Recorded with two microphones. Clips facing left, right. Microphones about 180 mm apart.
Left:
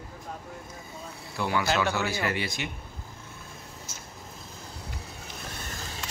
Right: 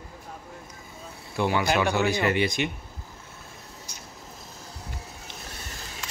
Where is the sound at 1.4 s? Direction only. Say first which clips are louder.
Right 3 dB; 20° right (ahead or behind).